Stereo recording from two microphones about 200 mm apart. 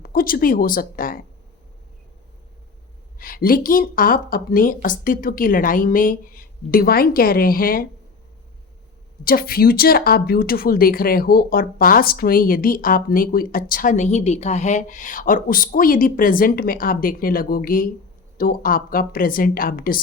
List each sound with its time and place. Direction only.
0.0 s speech: 45° left (ahead or behind)
3.2 s a woman's voice: 45° left (ahead or behind)
9.2 s a woman's voice: 50° left (ahead or behind)